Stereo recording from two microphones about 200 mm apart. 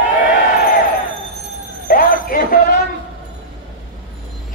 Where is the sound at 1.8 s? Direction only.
45° left (ahead or behind).